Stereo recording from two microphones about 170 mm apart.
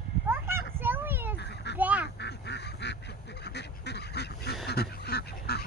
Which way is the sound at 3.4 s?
80° left.